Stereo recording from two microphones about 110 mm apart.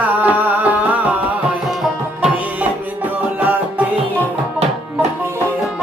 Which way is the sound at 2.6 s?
15° right (ahead or behind).